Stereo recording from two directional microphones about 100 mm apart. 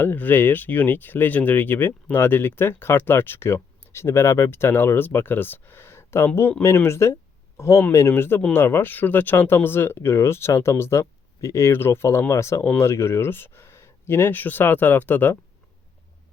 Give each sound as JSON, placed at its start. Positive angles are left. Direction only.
{"t": 0.0, "sound": "speech", "side_deg": 20}